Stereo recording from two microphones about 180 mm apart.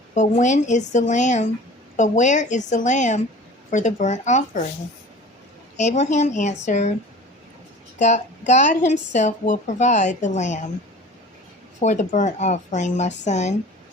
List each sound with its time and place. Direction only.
0.1 s a woman's voice: 45° left (ahead or behind)
5.7 s a woman's voice: 40° left (ahead or behind)
7.9 s a woman's voice: 40° left (ahead or behind)
11.8 s a woman's voice: 40° left (ahead or behind)